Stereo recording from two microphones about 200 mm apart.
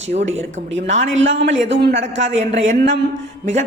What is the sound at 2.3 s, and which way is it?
Speech, 35° right (ahead or behind).